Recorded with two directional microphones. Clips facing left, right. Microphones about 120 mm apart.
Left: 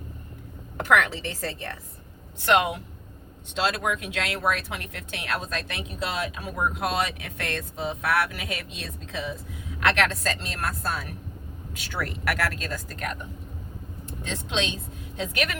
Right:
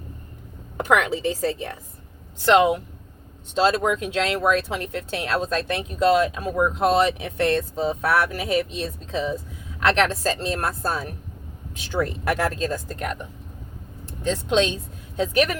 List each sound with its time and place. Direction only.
0.9 s speech: 15° right (ahead or behind)
3.5 s speech: 35° right (ahead or behind)
14.0 s speech: 40° right (ahead or behind)